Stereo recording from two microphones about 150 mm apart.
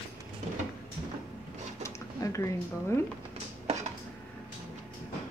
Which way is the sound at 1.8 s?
20° left (ahead or behind).